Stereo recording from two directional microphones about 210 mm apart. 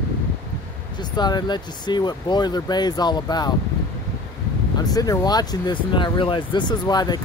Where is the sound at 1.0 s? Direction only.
20° left (ahead or behind).